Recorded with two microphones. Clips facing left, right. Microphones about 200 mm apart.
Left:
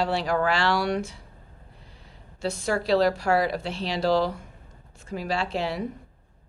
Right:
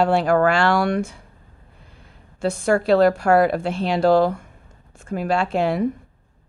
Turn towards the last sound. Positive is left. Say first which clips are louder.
# right 7 dB
turn(degrees=-50)  # may be behind; listen again after turning